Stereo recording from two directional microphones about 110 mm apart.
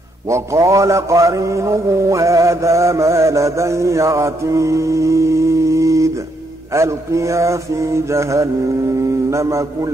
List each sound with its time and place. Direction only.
0.3 s mantra: 30° right (ahead or behind)